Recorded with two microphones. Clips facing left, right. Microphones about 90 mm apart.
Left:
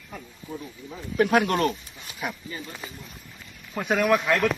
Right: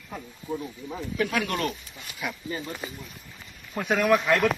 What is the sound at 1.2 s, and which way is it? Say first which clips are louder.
Speech: left 6 dB; 45° left (ahead or behind).